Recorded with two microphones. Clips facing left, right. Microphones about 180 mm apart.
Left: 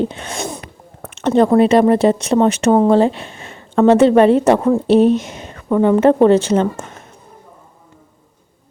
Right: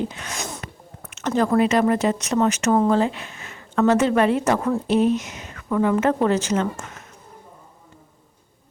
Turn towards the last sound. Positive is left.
turn(degrees=30)  # may be behind; listen again after turning